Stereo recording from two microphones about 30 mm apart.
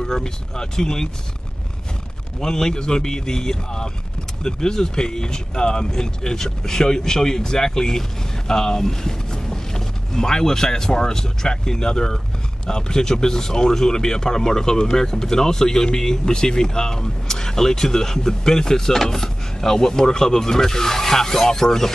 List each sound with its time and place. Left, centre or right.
0.0 s speech: left
2.4 s speech: centre